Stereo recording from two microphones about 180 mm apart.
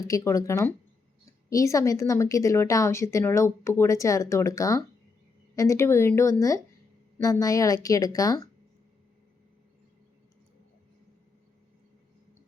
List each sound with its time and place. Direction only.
0.1 s a woman's voice: 15° left (ahead or behind)